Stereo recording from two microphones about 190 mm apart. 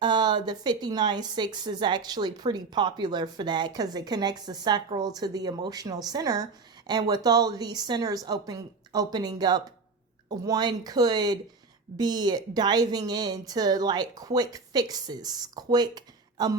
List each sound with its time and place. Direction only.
0.0 s a woman's voice: 25° right (ahead or behind)